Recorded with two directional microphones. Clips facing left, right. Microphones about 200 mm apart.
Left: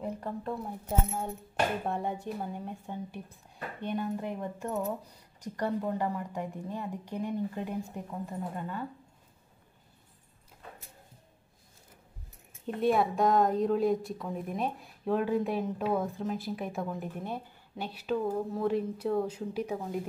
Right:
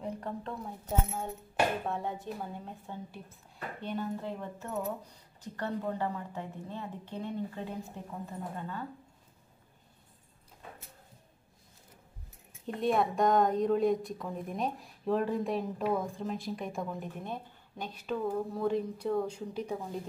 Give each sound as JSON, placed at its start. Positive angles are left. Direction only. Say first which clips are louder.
{"t": 0.0, "sound": "a sound", "louder": "left 2 dB", "side_deg": 10}
{"t": 1.9, "sound": "a woman's voice", "louder": "left 2 dB", "side_deg": 15}
{"t": 12.6, "sound": "a woman's voice", "louder": "left 2 dB", "side_deg": 0}